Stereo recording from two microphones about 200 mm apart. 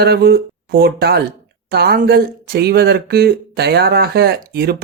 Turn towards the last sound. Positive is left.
turn(degrees=-50)  # may be behind; listen again after turning